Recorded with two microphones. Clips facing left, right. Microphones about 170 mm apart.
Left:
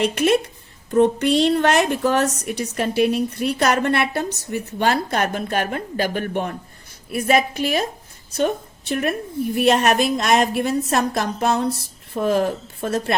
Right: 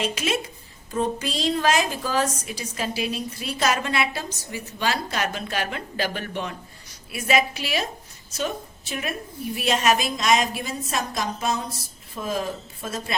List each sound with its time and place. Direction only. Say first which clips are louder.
0.0 s a woman's voice: left 8 dB; 60° left (ahead or behind)